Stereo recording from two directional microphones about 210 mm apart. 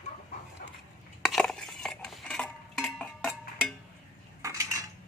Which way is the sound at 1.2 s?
Centre (ahead or behind).